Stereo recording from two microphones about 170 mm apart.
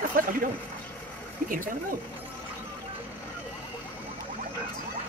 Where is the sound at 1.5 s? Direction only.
50° right (ahead or behind).